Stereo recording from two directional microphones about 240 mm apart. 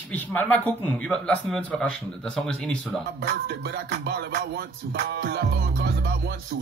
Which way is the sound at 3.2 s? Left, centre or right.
Right.